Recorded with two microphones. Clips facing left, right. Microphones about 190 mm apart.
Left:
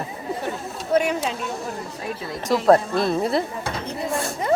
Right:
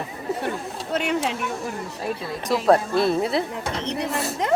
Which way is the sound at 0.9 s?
75° right (ahead or behind).